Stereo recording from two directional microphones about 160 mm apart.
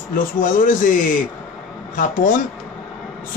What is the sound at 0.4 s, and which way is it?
Speech, 60° left (ahead or behind).